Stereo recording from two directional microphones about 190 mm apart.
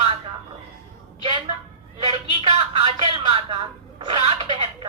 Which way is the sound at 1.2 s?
25° right (ahead or behind).